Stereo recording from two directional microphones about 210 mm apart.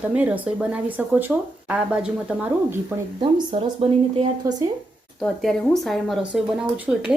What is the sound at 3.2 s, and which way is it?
Speech, 25° right (ahead or behind).